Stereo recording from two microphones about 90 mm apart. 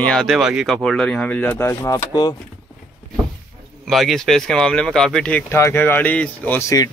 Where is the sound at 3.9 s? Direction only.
Centre (ahead or behind).